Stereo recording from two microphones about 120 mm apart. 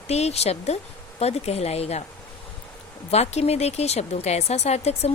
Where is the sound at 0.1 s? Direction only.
65° left (ahead or behind).